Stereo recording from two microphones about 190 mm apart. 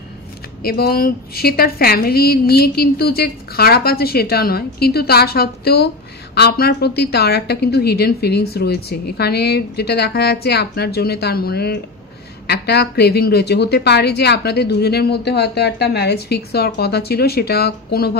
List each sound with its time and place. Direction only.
0.7 s a woman's voice: 55° left (ahead or behind)